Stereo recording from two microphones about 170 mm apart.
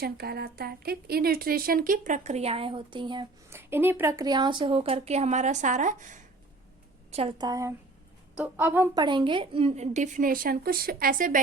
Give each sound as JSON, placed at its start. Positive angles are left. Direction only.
{"t": 0.0, "sound": "a woman's voice", "side_deg": -70}
{"t": 3.5, "sound": "speech", "side_deg": -15}
{"t": 7.1, "sound": "a woman's voice", "side_deg": -35}
{"t": 8.4, "sound": "a woman's voice", "side_deg": -10}
{"t": 9.0, "sound": "a woman's voice", "side_deg": -30}